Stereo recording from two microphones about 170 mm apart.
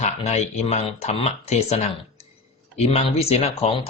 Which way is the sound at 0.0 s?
40° left (ahead or behind).